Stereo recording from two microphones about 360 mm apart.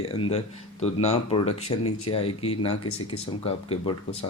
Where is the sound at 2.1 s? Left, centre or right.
Centre.